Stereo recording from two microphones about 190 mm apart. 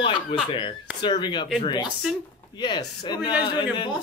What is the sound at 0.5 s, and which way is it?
A man's voice, 25° left (ahead or behind).